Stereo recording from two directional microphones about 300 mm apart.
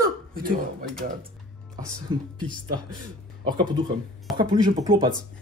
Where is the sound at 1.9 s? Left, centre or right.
Centre.